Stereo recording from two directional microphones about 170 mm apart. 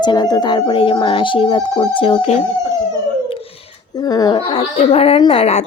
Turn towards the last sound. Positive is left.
turn(degrees=35)  # may be behind; listen again after turning